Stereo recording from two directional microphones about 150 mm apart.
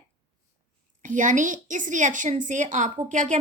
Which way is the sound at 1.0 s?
55° right (ahead or behind).